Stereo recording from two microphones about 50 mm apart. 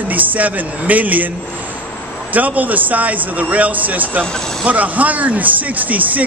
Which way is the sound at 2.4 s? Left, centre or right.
Right.